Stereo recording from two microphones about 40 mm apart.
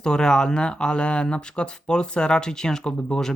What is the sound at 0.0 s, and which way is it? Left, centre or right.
Speech, centre.